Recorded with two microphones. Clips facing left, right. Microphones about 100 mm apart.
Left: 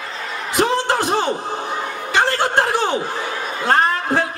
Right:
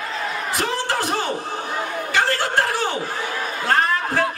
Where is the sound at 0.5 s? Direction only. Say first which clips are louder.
Left 7 dB; 20° left (ahead or behind).